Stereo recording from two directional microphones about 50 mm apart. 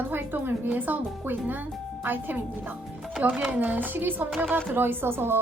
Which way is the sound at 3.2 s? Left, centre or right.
Right.